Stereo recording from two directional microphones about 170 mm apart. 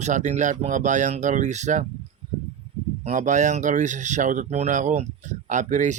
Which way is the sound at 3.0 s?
45° right (ahead or behind).